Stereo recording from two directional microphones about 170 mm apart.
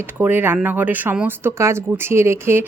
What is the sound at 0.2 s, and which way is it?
Speech, 10° right (ahead or behind).